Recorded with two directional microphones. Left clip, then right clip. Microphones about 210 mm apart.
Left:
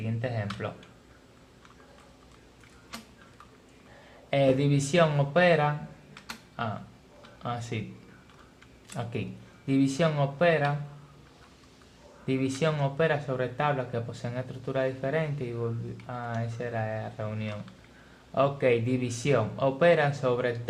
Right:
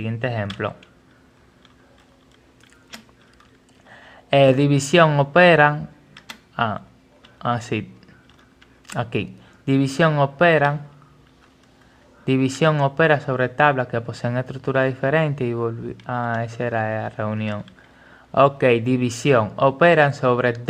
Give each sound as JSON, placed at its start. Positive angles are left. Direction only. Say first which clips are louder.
{"t": 0.0, "sound": "speech", "louder": "right 8 dB", "side_deg": -45}
{"t": 4.3, "sound": "speech", "louder": "right 9 dB", "side_deg": -40}
{"t": 8.9, "sound": "speech", "louder": "right 11 dB", "side_deg": -40}
{"t": 12.2, "sound": "speech", "louder": "right 9 dB", "side_deg": -40}